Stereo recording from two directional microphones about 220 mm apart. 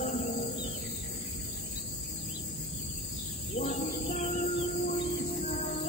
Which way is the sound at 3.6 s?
30° left (ahead or behind).